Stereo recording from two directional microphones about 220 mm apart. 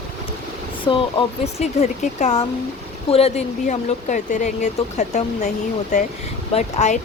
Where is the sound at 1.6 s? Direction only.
30° left (ahead or behind).